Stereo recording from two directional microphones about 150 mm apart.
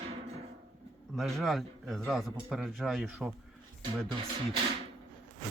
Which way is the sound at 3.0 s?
10° right (ahead or behind).